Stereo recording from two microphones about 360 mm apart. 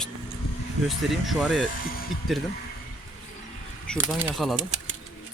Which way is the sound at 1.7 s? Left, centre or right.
Left.